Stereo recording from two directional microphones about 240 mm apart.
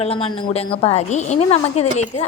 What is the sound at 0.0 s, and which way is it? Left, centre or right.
A woman's voice, left.